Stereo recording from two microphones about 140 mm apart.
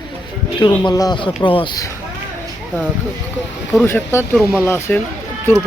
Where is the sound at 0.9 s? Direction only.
30° left (ahead or behind).